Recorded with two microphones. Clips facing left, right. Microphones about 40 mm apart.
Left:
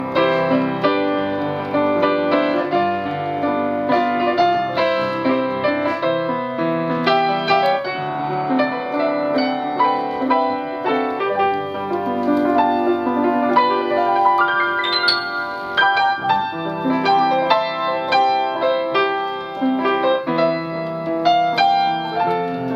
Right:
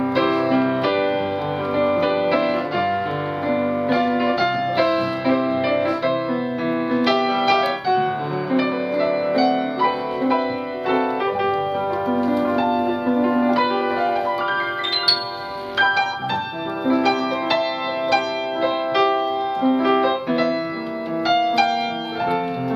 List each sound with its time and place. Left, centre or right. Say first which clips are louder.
0.2 s music: left 4 dB; centre
0.6 s music: left 1 dB; centre
14.4 s music: left 5 dB; centre
17.0 s music: left 4 dB; centre
18.6 s music: left 1 dB; centre